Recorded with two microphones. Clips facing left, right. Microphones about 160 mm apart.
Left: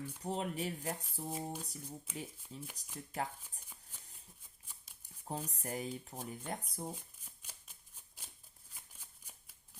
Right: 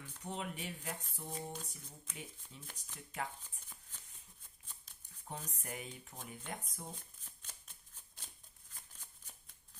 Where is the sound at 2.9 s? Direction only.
35° left (ahead or behind).